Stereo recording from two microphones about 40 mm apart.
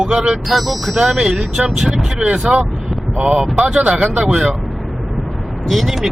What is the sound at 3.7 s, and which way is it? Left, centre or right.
Speech, right.